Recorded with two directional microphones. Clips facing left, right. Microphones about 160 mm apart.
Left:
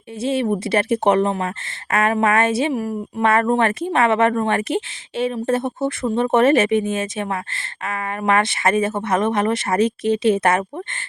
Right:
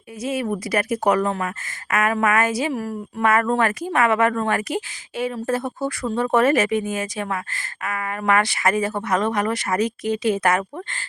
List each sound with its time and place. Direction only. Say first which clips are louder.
0.2 s a woman's voice: left 4 dB; 30° left (ahead or behind)
3.2 s a woman's voice: left 2 dB; 30° left (ahead or behind)